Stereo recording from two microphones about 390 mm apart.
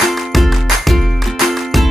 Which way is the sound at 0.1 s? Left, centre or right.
Centre.